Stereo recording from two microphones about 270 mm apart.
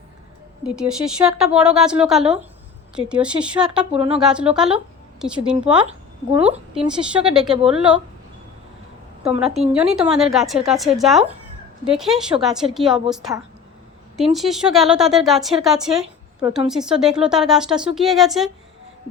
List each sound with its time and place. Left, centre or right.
0.6 s speech: centre
3.9 s speech: right
4.2 s speech: centre
7.0 s speech: centre
9.2 s speech: centre